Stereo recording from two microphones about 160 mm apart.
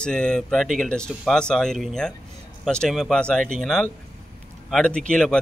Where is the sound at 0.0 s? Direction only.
5° left (ahead or behind).